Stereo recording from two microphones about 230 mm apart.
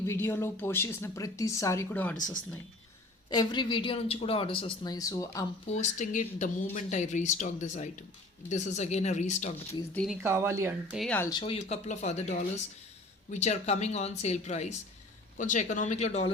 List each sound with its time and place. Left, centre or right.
0.0 s speech: centre
3.2 s speech: centre
5.6 s speech: left
9.9 s speech: centre
10.2 s speech: centre
10.9 s speech: centre
11.3 s speech: left